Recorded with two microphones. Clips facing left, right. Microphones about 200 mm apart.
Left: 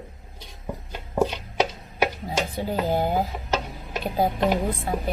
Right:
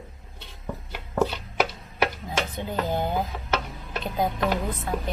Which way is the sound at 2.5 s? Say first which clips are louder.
Left 4 dB; 30° left (ahead or behind).